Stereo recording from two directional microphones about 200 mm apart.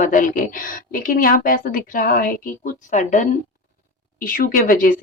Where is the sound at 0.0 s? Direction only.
40° left (ahead or behind).